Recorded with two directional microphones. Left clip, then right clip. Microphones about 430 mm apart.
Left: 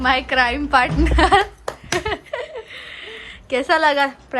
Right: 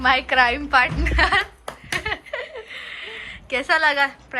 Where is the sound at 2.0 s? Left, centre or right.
Centre.